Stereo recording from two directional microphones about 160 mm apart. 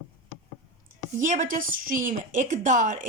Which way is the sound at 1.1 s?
55° right (ahead or behind).